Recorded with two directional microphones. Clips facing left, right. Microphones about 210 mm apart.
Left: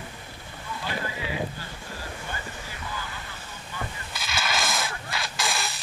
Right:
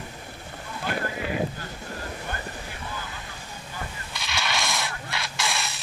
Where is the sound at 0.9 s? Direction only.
50° right (ahead or behind).